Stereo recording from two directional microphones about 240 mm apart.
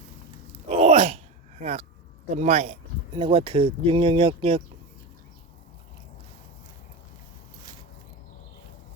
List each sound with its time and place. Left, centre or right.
0.7 s groan: right
2.3 s speech: right